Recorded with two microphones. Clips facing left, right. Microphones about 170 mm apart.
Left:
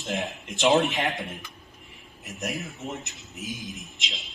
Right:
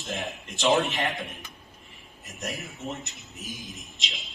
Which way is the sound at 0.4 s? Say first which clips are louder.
Left 2 dB; 20° left (ahead or behind).